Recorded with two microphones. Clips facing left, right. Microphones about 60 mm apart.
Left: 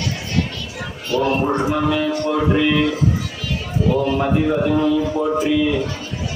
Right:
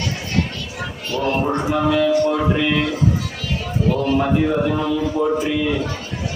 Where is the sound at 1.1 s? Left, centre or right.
Left.